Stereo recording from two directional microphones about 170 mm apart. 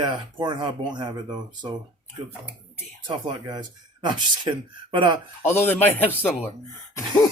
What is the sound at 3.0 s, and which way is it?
Speech, 25° right (ahead or behind).